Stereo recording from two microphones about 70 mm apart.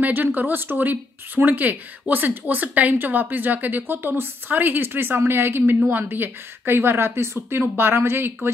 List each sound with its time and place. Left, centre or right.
0.0 s speech: right